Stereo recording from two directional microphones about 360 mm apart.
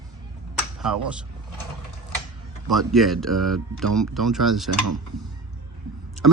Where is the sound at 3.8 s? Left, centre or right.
Right.